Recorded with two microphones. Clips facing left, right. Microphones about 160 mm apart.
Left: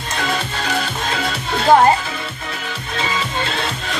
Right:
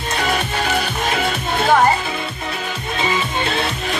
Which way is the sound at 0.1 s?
15° right (ahead or behind).